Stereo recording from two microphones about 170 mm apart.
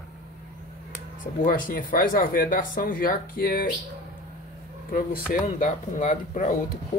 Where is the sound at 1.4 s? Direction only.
55° left (ahead or behind).